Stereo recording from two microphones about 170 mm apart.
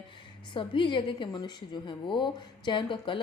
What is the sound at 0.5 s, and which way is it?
A woman's voice, 30° left (ahead or behind).